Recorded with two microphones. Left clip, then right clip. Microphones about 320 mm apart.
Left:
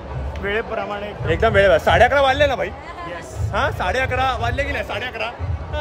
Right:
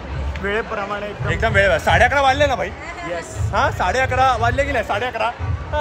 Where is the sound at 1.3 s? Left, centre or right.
Left.